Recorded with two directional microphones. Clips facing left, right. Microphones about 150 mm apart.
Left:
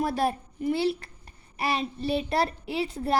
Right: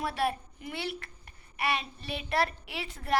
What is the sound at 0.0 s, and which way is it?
A child's voice, 40° left (ahead or behind).